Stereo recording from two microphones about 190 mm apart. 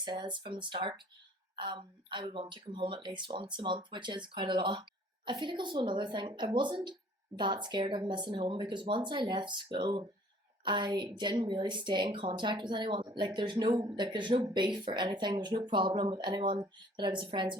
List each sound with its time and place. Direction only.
0.0 s speech: 25° right (ahead or behind)